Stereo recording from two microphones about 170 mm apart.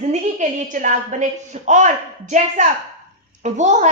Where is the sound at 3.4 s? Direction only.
45° right (ahead or behind).